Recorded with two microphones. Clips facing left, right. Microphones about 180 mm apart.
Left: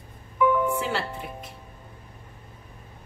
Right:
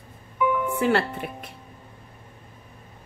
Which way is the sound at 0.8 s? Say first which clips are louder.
Right 7 dB; 60° right (ahead or behind).